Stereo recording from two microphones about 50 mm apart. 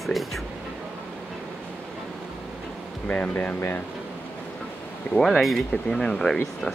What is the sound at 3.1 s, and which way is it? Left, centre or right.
Speech, left.